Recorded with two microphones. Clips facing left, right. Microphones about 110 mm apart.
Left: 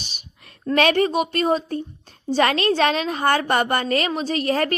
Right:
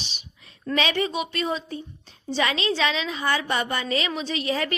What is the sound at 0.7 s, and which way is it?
A woman's voice, 50° left (ahead or behind).